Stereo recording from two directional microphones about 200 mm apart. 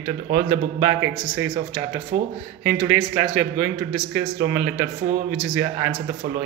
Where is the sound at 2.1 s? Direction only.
40° right (ahead or behind).